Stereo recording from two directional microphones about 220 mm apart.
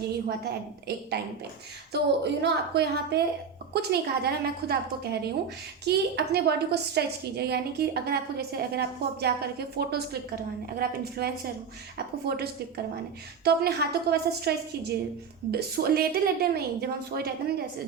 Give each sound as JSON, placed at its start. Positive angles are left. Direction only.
{"t": 1.9, "sound": "a woman's voice", "side_deg": -50}